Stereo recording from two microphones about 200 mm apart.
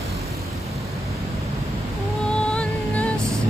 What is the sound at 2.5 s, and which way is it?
Music, 5° left (ahead or behind).